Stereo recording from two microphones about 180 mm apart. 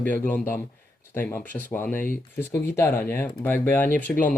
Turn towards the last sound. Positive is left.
turn(degrees=10)  # may be behind; listen again after turning